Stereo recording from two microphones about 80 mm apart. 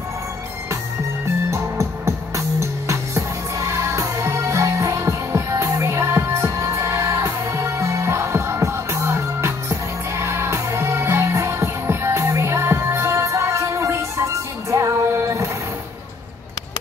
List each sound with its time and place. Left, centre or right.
1.2 s music: right